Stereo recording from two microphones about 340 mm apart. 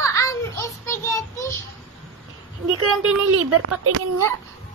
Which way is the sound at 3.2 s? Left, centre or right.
Right.